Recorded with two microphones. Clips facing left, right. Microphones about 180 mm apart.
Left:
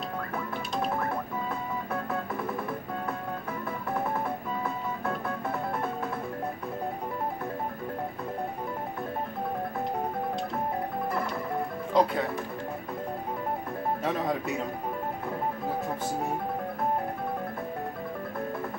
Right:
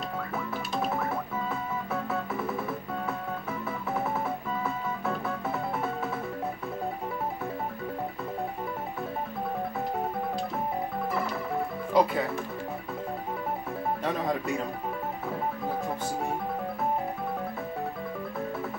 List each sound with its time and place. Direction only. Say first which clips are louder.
0.7 s music: even; 5° right (ahead or behind)
2.3 s music: right 1 dB; 5° right (ahead or behind)
4.6 s music: right 1 dB; 5° right (ahead or behind)
11.9 s speech: right 1 dB; 5° right (ahead or behind)
14.0 s music: even; centre (ahead or behind)